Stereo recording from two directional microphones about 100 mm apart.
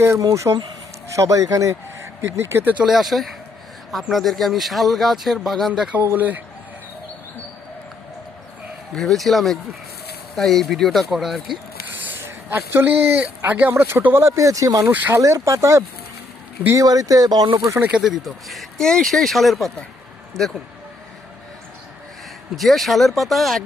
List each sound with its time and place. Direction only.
0.5 s speech: 45° right (ahead or behind)
1.1 s speech: 35° right (ahead or behind)
2.8 s speech: centre (ahead or behind)
6.0 s speech: 20° right (ahead or behind)
9.0 s speech: centre (ahead or behind)
12.1 s speech: 25° right (ahead or behind)
14.8 s speech: 20° right (ahead or behind)
15.2 s speech: 35° right (ahead or behind)
17.7 s speech: 15° right (ahead or behind)
18.0 s speech: 5° right (ahead or behind)
22.5 s speech: centre (ahead or behind)